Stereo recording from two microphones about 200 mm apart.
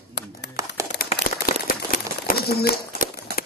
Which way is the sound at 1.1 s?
45° left (ahead or behind).